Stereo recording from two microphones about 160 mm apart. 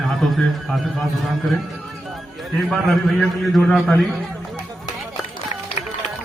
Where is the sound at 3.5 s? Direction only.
Centre (ahead or behind).